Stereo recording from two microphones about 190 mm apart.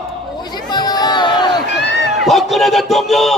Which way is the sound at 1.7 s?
65° left (ahead or behind).